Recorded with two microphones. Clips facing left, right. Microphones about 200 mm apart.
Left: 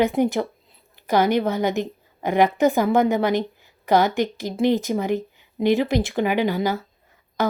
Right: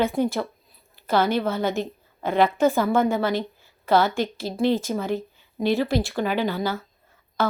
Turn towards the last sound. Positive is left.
turn(degrees=15)  # may be behind; listen again after turning